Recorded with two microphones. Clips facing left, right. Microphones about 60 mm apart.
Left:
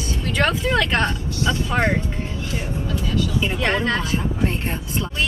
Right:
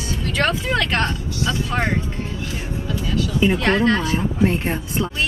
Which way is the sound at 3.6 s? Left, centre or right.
Centre.